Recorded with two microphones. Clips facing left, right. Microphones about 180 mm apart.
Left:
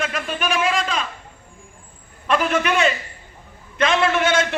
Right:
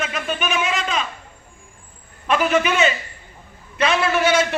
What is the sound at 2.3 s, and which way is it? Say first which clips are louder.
A man's voice: right 1 dB; 5° right (ahead or behind).